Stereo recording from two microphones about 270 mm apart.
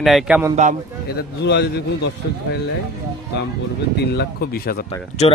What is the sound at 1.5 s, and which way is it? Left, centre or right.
Speech, left.